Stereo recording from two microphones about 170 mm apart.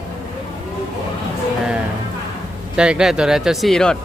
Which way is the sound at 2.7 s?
5° right (ahead or behind).